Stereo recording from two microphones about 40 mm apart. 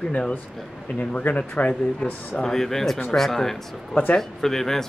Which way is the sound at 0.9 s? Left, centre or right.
Left.